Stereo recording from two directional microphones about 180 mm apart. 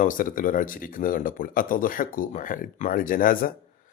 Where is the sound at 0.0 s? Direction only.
50° left (ahead or behind).